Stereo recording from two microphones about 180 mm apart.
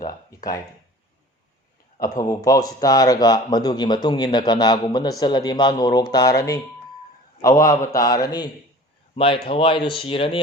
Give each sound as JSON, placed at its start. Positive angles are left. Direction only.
{"t": 0.0, "sound": "a sound", "side_deg": 20}
{"t": 2.0, "sound": "speech", "side_deg": 20}
{"t": 7.4, "sound": "a man's voice", "side_deg": 20}